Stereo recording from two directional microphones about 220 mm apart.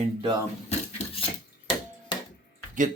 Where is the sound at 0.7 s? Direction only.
30° left (ahead or behind).